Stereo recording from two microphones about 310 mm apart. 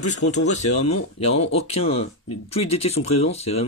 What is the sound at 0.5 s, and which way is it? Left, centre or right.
Speech, left.